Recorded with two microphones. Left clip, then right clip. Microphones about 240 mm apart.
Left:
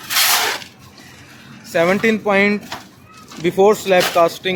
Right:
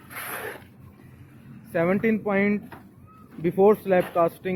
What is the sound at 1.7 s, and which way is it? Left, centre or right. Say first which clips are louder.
Speech: left 8 dB; centre.